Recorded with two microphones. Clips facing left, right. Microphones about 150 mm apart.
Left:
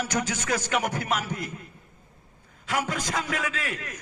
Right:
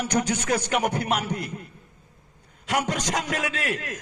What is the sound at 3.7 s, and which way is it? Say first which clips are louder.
Speech: right 6 dB; 90° right.